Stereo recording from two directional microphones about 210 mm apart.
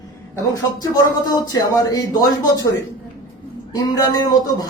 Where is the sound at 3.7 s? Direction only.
15° left (ahead or behind).